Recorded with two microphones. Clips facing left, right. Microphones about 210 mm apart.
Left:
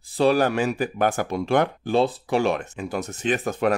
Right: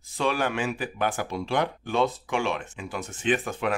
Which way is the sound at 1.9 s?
35° left (ahead or behind).